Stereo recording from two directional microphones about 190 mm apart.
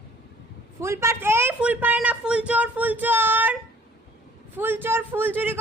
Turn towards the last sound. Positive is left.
turn(degrees=-10)  # may be behind; listen again after turning